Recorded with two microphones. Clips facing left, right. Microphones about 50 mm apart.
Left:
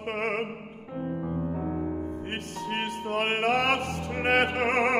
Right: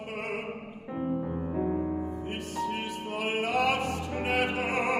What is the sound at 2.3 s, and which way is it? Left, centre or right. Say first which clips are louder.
Music: even; left.